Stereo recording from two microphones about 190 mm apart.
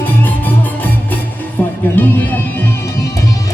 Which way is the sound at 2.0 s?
10° left (ahead or behind).